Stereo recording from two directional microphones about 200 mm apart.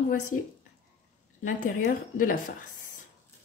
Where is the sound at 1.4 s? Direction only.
45° left (ahead or behind).